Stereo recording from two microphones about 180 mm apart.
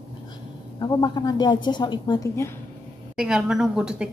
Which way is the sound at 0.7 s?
20° left (ahead or behind).